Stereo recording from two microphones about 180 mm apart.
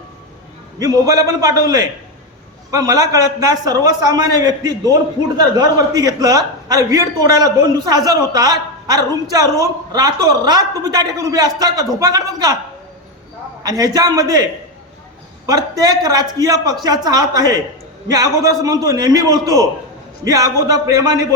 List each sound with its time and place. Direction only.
0.8 s a man's voice: 20° right (ahead or behind)
13.6 s a man's voice: 20° right (ahead or behind)
15.4 s a man's voice: 20° right (ahead or behind)